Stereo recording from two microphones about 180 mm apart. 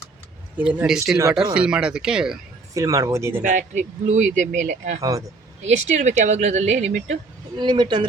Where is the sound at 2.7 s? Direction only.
15° right (ahead or behind).